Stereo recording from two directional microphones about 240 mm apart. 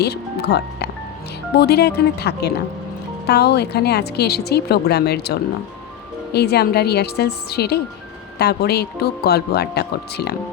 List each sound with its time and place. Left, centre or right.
0.0 s speech: left